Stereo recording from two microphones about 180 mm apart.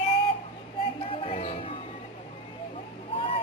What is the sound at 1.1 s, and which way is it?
Music, 35° left (ahead or behind).